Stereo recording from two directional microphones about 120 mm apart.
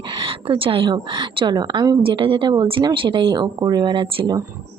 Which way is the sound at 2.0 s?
45° right (ahead or behind).